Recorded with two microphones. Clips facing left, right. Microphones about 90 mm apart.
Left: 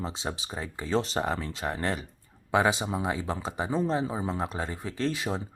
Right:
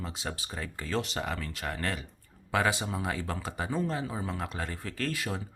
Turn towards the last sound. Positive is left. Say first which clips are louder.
# left 4 dB
turn(degrees=20)  # may be behind; listen again after turning